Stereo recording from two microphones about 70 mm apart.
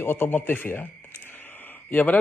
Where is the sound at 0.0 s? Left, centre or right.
Left.